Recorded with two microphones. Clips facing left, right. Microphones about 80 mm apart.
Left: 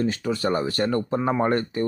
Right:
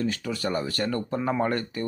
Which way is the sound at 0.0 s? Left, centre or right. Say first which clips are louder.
Left 4 dB; left.